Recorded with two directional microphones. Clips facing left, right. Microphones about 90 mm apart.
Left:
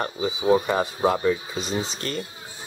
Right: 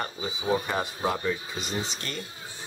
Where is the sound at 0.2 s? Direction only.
40° left (ahead or behind).